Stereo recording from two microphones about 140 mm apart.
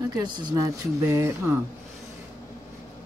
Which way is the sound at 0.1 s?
30° right (ahead or behind).